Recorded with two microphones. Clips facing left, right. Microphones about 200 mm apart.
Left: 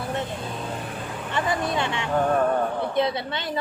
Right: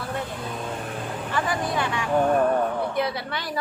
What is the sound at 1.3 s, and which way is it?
A woman's voice, 25° left (ahead or behind).